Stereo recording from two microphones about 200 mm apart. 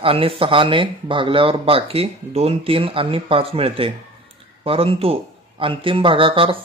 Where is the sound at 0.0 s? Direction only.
30° right (ahead or behind).